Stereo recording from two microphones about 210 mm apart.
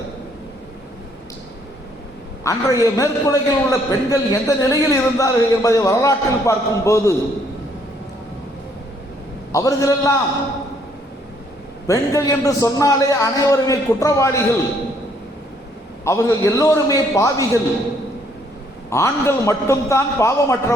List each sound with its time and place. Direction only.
2.4 s a man's voice: 15° left (ahead or behind)
9.5 s a man's voice: 15° left (ahead or behind)
11.9 s a man's voice: 15° left (ahead or behind)
16.0 s a man's voice: 15° left (ahead or behind)
18.9 s a man's voice: 15° left (ahead or behind)